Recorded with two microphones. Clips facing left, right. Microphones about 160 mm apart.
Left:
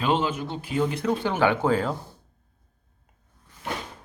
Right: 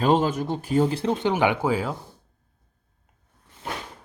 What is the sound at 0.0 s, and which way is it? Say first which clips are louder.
Speech: right 4 dB; 40° right (ahead or behind).